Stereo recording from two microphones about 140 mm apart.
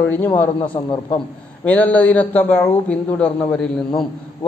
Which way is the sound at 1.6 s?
10° left (ahead or behind).